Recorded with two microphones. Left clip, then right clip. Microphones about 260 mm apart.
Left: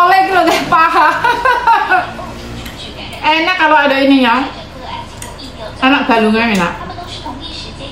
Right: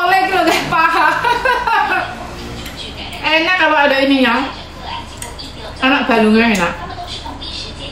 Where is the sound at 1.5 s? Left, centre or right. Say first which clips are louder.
Left 4 dB; centre.